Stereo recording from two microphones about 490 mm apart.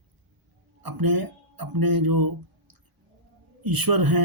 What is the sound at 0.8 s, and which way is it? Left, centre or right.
Speech, right.